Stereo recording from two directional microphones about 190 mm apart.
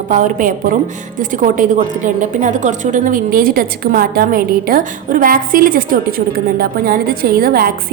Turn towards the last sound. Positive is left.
turn(degrees=-50)  # may be behind; listen again after turning